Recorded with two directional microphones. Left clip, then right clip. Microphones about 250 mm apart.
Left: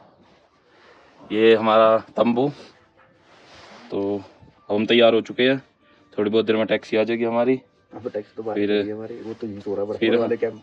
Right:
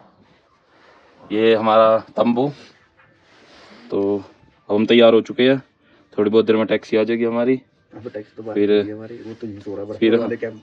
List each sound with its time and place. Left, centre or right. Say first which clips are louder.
0.8 s speech: right 2 dB; centre
3.9 s speech: right 5 dB; centre
7.9 s speech: left 2 dB; left
8.5 s speech: right 5 dB; centre
8.9 s speech: left 1 dB; left
9.9 s speech: right 4 dB; centre
10.3 s speech: left 2 dB; left